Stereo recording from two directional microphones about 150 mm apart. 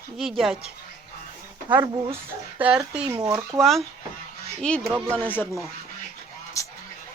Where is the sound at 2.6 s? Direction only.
10° right (ahead or behind).